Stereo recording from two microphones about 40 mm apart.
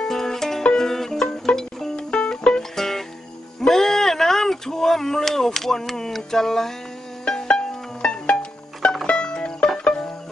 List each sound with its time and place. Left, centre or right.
0.0 s music: centre
2.0 s music: left
3.6 s bleat: centre
7.2 s music: centre